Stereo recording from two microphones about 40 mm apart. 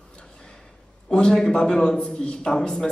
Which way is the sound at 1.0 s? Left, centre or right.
Left.